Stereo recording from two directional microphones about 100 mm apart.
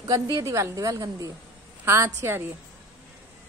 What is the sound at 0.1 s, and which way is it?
A woman's voice, 35° right (ahead or behind).